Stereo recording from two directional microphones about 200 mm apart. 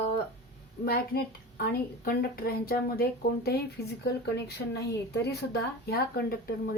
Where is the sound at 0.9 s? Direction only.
50° left (ahead or behind).